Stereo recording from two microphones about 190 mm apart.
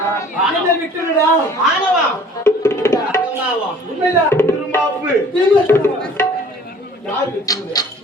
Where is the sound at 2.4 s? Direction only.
15° left (ahead or behind).